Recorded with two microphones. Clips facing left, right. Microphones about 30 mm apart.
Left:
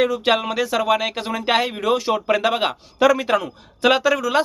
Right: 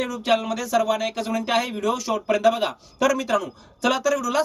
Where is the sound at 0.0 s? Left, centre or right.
Left.